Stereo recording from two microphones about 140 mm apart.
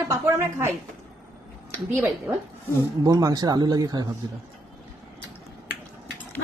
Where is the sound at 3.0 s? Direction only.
25° right (ahead or behind).